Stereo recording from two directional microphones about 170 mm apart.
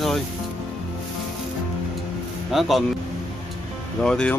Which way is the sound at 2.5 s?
Centre (ahead or behind).